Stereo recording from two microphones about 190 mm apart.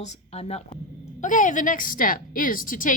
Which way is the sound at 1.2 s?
45° left (ahead or behind).